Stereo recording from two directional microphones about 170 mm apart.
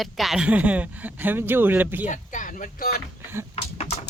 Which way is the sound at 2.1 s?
50° left (ahead or behind).